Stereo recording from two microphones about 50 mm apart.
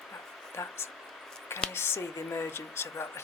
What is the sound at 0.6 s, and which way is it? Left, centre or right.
Speech, left.